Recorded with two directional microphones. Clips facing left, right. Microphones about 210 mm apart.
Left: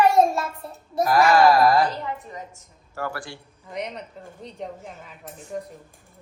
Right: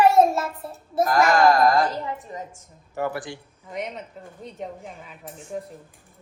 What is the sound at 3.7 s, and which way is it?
Speech, centre (ahead or behind).